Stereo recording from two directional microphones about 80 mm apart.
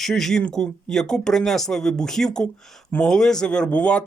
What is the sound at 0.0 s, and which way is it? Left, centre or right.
Speech, centre.